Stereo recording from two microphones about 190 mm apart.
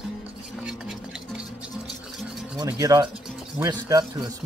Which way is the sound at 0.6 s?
5° right (ahead or behind).